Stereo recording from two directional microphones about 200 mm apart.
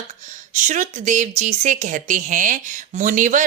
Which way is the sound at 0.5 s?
40° right (ahead or behind).